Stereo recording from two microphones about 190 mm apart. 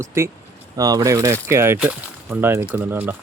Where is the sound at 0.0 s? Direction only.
15° right (ahead or behind).